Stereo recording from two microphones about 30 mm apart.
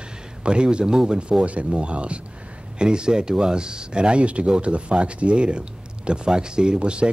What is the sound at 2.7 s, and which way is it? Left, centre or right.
Speech, right.